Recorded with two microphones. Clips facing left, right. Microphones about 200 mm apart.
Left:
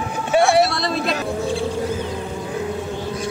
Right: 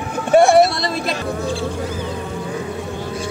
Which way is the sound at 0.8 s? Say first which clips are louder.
Even; centre (ahead or behind).